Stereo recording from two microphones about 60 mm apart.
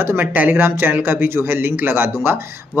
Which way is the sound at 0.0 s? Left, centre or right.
Right.